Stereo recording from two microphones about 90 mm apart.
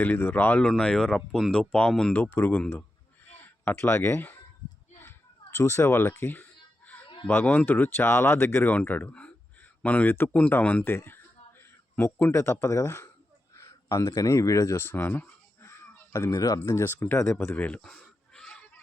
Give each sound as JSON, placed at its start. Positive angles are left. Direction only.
{"t": 0.0, "sound": "speech", "side_deg": 20}
{"t": 0.7, "sound": "speech", "side_deg": 5}
{"t": 2.1, "sound": "speech", "side_deg": 20}
{"t": 16.1, "sound": "speech", "side_deg": 40}
{"t": 16.7, "sound": "speech", "side_deg": 25}
{"t": 17.7, "sound": "a sound", "side_deg": 5}